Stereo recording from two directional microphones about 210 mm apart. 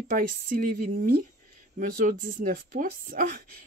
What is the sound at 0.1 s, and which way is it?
Speech, 40° right (ahead or behind).